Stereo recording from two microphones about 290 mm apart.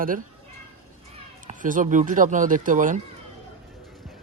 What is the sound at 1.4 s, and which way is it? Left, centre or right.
Speech, right.